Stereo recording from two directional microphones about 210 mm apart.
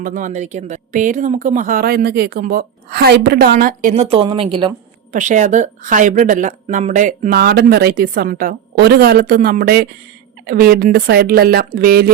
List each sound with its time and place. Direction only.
0.0 s speech: 40° right (ahead or behind)
5.1 s speech: 35° right (ahead or behind)